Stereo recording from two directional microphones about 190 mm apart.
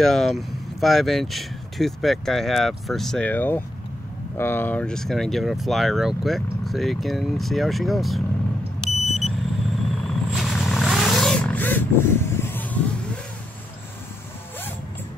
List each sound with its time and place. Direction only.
0.0 s speech: centre (ahead or behind)
8.8 s vehicle: centre (ahead or behind)